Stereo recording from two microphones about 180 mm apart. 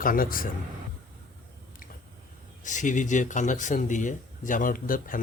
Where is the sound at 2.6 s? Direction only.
45° left (ahead or behind).